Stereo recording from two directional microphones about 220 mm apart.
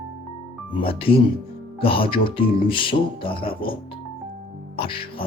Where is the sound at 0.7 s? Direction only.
25° left (ahead or behind).